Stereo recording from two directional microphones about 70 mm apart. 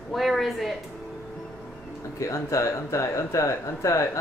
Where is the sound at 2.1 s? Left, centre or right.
Left.